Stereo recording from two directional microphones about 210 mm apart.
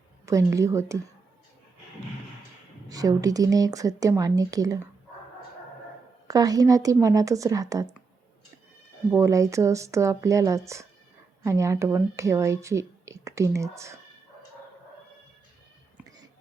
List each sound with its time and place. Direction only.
0.3 s speech: 15° right (ahead or behind)
2.9 s speech: 15° right (ahead or behind)
6.2 s speech: 15° right (ahead or behind)
9.1 s speech: 15° right (ahead or behind)